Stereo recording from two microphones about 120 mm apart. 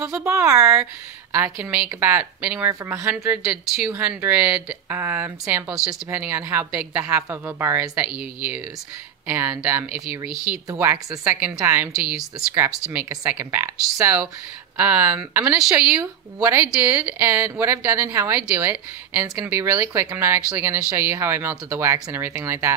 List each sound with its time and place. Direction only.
0.2 s speech: 25° right (ahead or behind)
3.6 s speech: 5° right (ahead or behind)
3.9 s speech: 15° right (ahead or behind)
13.2 s speech: 15° right (ahead or behind)